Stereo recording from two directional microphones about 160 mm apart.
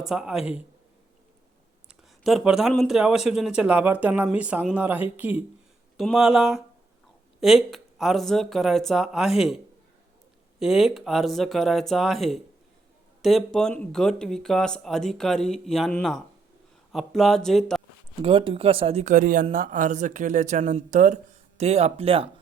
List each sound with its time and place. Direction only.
0.0 s speech: 5° right (ahead or behind)
1.9 s speech: 5° right (ahead or behind)
10.6 s speech: centre (ahead or behind)
18.2 s a woman's voice: 35° right (ahead or behind)